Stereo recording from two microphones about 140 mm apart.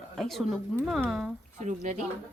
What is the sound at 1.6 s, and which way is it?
Speech, 65° right (ahead or behind).